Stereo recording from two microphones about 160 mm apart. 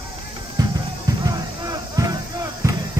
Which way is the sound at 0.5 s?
25° right (ahead or behind).